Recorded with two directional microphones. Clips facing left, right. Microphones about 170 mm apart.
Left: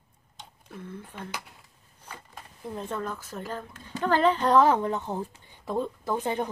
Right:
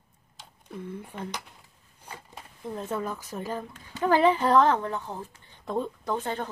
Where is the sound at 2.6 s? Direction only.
5° right (ahead or behind).